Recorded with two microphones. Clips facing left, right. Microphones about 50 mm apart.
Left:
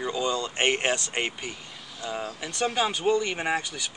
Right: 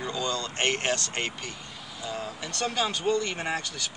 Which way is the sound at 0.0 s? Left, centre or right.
Centre.